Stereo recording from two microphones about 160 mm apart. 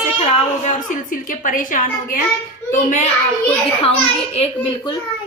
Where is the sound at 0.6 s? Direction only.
50° left (ahead or behind).